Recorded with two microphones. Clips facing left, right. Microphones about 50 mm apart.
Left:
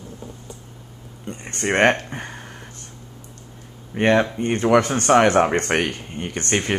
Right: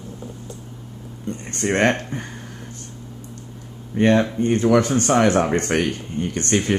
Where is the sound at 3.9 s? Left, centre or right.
Left.